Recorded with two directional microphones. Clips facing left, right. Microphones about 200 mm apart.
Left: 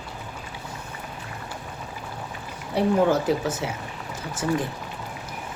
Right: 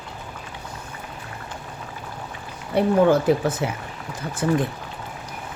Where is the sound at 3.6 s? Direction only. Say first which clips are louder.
Right 4 dB; 55° right (ahead or behind).